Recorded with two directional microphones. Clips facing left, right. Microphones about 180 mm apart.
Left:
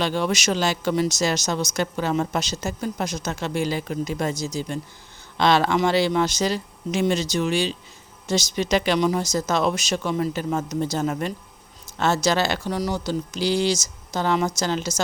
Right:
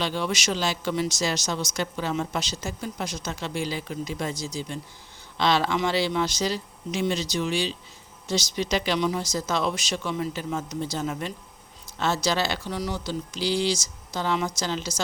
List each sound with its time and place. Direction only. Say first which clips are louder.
0.0 s a woman's voice: left 4 dB; 45° left (ahead or behind)